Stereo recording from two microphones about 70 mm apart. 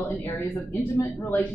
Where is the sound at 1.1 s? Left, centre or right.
Left.